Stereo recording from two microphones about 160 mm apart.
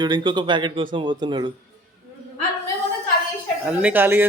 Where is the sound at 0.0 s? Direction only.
30° right (ahead or behind).